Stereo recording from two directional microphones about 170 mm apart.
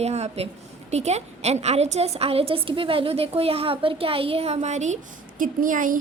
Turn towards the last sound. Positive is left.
turn(degrees=-50)  # may be behind; listen again after turning